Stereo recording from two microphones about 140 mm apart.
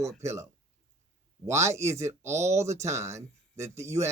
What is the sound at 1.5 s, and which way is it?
Speech, 20° right (ahead or behind).